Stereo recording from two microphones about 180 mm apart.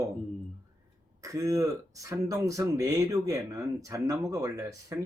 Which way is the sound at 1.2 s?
20° right (ahead or behind).